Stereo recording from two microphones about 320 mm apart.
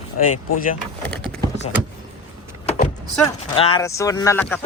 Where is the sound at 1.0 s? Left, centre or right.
Centre.